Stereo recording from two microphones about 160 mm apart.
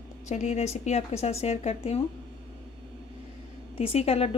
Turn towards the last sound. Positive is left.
turn(degrees=40)  # may be behind; listen again after turning